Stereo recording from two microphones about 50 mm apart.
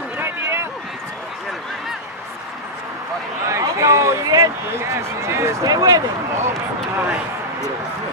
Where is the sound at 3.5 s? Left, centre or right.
Right.